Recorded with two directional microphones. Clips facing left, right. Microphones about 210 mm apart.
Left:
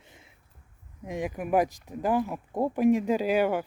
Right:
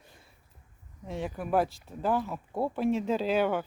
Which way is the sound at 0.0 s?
20° left (ahead or behind).